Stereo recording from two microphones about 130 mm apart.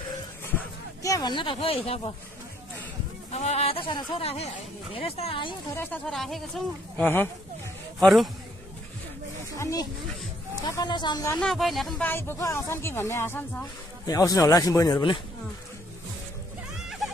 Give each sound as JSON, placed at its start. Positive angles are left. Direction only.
{"t": 1.0, "sound": "speech", "side_deg": 30}
{"t": 3.3, "sound": "speech", "side_deg": 55}
{"t": 4.9, "sound": "speech", "side_deg": 50}
{"t": 6.0, "sound": "speech", "side_deg": 0}
{"t": 7.0, "sound": "speech", "side_deg": 15}
{"t": 8.0, "sound": "speech", "side_deg": 0}
{"t": 9.6, "sound": "speech", "side_deg": 25}
{"t": 11.3, "sound": "speech", "side_deg": 0}
{"t": 12.0, "sound": "speech", "side_deg": 15}
{"t": 14.0, "sound": "speech", "side_deg": 30}